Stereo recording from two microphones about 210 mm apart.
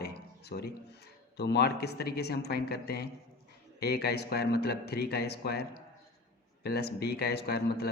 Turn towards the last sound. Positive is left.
turn(degrees=50)  # may be behind; listen again after turning